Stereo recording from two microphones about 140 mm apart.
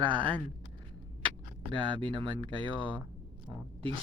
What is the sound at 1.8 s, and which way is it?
Speech, 35° right (ahead or behind).